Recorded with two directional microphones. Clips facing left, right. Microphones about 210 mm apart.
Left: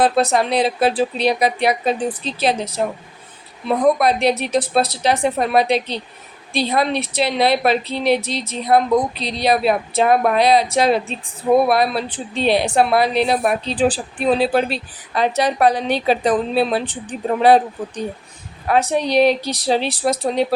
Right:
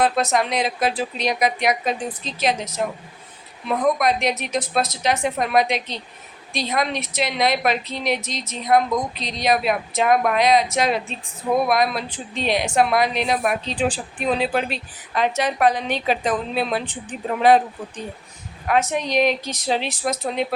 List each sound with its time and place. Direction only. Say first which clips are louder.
0.0 s a woman's voice: left 4 dB; 30° left (ahead or behind)